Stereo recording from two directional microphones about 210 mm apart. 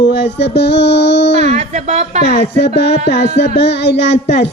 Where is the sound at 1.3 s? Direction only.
35° right (ahead or behind).